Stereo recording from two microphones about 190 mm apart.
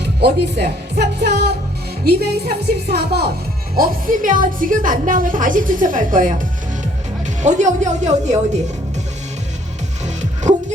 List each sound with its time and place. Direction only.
0.0 s a woman's voice: 60° right (ahead or behind)
3.8 s a woman's voice: 45° right (ahead or behind)
7.4 s speech: 40° right (ahead or behind)
10.5 s music: 40° right (ahead or behind)